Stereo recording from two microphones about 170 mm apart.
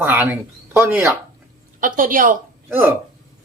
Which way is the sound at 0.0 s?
10° right (ahead or behind).